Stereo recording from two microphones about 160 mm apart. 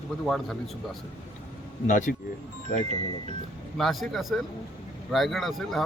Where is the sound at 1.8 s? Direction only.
55° left (ahead or behind).